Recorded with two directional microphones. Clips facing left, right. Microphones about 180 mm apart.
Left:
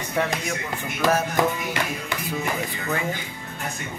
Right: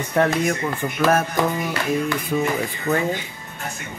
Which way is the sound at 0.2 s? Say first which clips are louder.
Right 6 dB; 55° right (ahead or behind).